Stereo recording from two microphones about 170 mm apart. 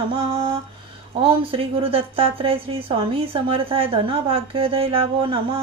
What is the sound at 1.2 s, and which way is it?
Speech, 35° right (ahead or behind).